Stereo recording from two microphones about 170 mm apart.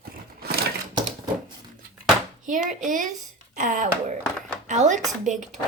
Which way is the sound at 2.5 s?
50° right (ahead or behind).